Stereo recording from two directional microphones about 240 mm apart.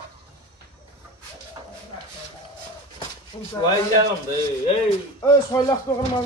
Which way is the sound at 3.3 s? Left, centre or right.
Left.